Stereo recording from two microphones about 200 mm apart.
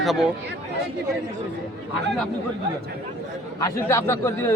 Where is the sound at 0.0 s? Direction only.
Centre (ahead or behind).